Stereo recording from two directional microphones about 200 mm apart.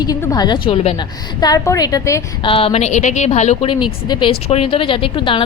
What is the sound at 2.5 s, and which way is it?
A woman's voice, 25° left (ahead or behind).